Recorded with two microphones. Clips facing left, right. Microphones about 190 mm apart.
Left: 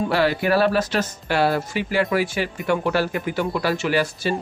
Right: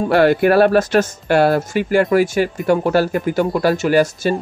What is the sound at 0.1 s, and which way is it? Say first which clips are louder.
Speech: right 9 dB; 55° right (ahead or behind).